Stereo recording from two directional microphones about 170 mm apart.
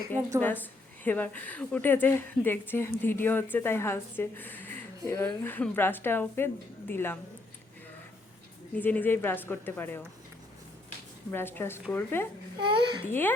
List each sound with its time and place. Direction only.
0.2 s a woman's voice: 15° right (ahead or behind)
0.4 s a woman's voice: 10° left (ahead or behind)
8.7 s a woman's voice: 10° left (ahead or behind)
11.3 s a woman's voice: 10° left (ahead or behind)
12.6 s a child's voice: 30° right (ahead or behind)